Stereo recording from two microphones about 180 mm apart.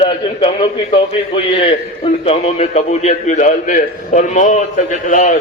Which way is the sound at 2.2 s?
35° left (ahead or behind).